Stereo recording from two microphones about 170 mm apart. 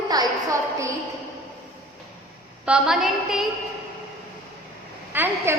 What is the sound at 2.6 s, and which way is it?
Speech, 5° right (ahead or behind).